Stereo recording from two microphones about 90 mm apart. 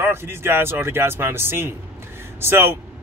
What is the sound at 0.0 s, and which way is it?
Speech, 25° right (ahead or behind).